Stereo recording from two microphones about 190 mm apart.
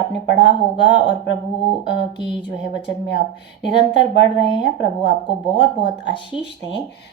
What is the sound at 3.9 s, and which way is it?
Speech, 65° left (ahead or behind).